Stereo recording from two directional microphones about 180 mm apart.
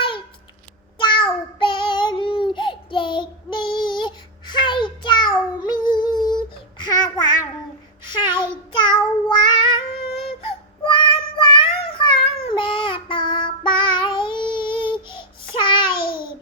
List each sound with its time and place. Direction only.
0.9 s child singing: 25° left (ahead or behind)
8.0 s a sound: 25° left (ahead or behind)
8.7 s meow: 25° left (ahead or behind)
10.9 s child singing: 25° left (ahead or behind)
16.0 s babbling: 55° left (ahead or behind)